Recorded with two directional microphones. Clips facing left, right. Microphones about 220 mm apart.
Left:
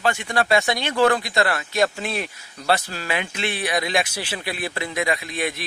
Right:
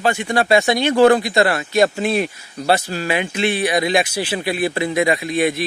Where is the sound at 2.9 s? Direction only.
5° right (ahead or behind).